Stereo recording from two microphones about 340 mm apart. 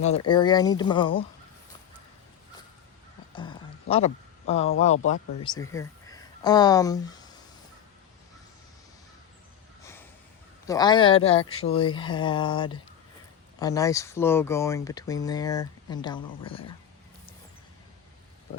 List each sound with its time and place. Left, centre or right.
0.3 s speech: centre
3.3 s a sound: centre
4.8 s speech: centre
10.7 s speech: centre